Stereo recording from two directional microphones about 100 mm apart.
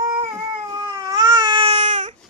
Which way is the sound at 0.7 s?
45° right (ahead or behind).